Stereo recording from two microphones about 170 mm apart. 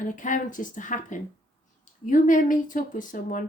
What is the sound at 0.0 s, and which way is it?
Speech, 50° left (ahead or behind).